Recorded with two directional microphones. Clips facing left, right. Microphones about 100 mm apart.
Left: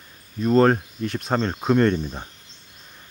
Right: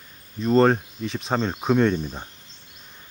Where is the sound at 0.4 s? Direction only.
5° left (ahead or behind).